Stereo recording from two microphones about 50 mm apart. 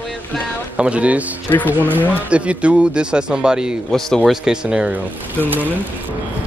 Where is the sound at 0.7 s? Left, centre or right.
Right.